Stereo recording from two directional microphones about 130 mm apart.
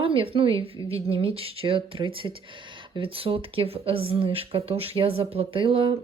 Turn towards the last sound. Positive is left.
turn(degrees=-40)  # may be behind; listen again after turning